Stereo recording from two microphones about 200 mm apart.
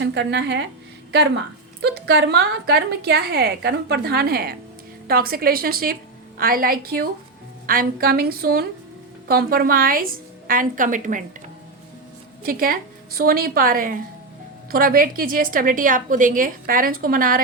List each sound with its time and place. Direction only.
0.0 s speech: 60° right (ahead or behind)
1.8 s a woman's voice: 55° right (ahead or behind); by 11.2 s 40° right (ahead or behind)
12.4 s a woman's voice: 45° right (ahead or behind)